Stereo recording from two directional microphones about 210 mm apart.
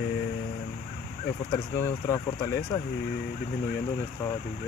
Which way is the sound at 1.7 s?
15° left (ahead or behind).